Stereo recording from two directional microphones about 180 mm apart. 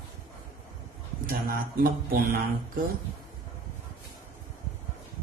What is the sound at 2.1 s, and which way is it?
Speech, 55° right (ahead or behind).